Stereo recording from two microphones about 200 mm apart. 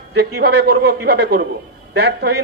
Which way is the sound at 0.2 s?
55° right (ahead or behind).